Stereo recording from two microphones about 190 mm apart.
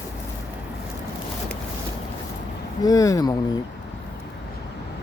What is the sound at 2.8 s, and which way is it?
Speech, 20° left (ahead or behind).